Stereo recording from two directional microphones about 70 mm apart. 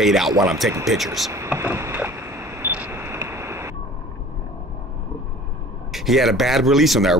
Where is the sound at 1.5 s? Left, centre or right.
Right.